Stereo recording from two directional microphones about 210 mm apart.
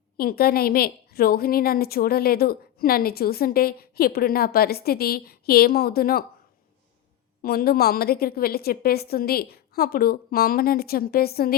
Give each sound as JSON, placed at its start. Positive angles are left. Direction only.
{"t": 0.2, "sound": "a woman's voice", "side_deg": 45}
{"t": 7.4, "sound": "a woman's voice", "side_deg": 45}